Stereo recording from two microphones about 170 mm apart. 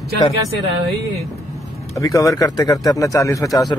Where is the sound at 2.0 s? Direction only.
20° left (ahead or behind).